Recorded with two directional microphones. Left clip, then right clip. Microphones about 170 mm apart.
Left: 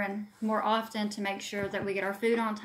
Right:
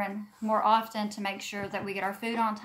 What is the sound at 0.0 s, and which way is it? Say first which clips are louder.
Speech: even; 20° right (ahead or behind).